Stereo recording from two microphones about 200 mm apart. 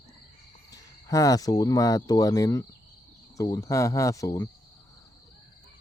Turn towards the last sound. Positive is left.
turn(degrees=15)  # may be behind; listen again after turning